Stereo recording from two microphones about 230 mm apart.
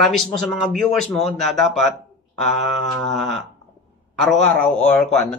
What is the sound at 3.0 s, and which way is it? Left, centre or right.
Speech, centre.